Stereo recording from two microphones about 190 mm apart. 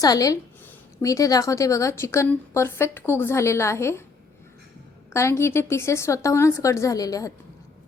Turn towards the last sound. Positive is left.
turn(degrees=20)  # may be behind; listen again after turning